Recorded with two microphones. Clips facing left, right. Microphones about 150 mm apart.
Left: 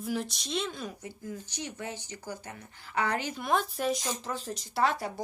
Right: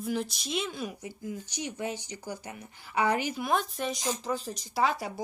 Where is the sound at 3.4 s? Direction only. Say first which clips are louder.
Left 1 dB; centre (ahead or behind).